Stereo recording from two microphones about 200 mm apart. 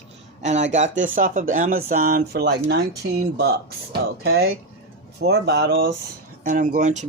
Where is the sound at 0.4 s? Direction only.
35° right (ahead or behind); by 5.9 s 50° right (ahead or behind).